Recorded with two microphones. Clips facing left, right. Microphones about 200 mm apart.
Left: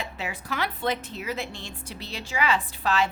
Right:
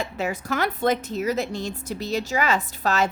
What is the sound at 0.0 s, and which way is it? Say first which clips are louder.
A woman's voice: right 7 dB; 45° right (ahead or behind).